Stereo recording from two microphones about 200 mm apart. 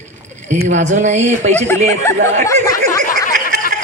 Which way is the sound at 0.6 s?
35° right (ahead or behind).